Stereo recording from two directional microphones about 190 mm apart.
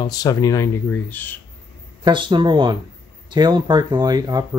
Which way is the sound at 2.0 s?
25° right (ahead or behind).